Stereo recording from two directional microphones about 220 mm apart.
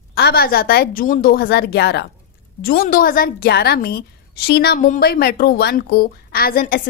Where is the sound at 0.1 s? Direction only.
45° left (ahead or behind).